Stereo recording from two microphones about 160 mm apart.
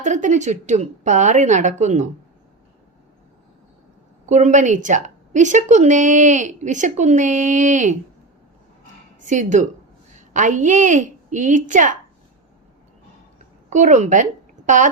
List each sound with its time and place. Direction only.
0.0 s a woman's voice: 50° right (ahead or behind)
4.3 s a woman's voice: 45° right (ahead or behind)
9.2 s a woman's voice: 50° right (ahead or behind)
13.7 s a woman's voice: 50° right (ahead or behind)